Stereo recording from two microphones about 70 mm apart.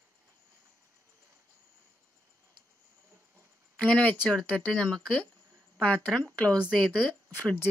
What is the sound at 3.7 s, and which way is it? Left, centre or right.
Speech, centre.